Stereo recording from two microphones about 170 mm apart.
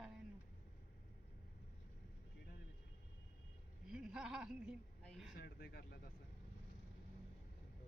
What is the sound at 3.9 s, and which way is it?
Speech, 5° right (ahead or behind).